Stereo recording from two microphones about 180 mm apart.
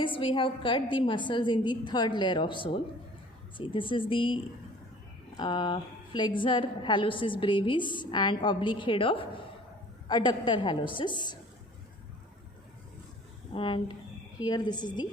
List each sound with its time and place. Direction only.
0.0 s a woman's voice: 30° left (ahead or behind)
5.4 s a woman's voice: 25° left (ahead or behind)
13.5 s a woman's voice: 30° left (ahead or behind)